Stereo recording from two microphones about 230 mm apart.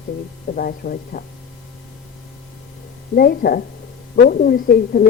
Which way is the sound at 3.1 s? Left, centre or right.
Left.